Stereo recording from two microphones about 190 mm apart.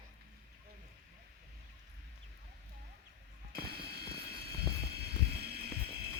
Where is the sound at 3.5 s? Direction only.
55° right (ahead or behind).